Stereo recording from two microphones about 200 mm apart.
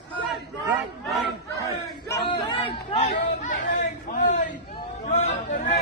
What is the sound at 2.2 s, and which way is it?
Chatter, 25° left (ahead or behind).